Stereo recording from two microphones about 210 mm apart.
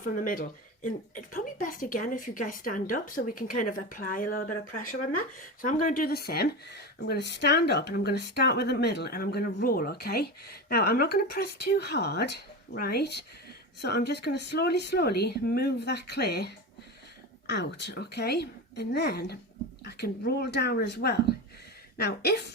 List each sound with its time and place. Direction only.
0.0 s speech: 40° left (ahead or behind)